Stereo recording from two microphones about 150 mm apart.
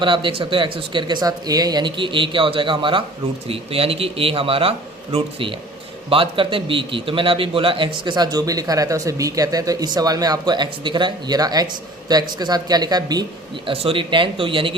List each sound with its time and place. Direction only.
0.0 s a man's voice: 35° right (ahead or behind)
13.7 s speech: 35° right (ahead or behind)